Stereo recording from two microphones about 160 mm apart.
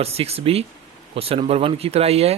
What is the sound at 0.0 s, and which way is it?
Speech, 40° right (ahead or behind).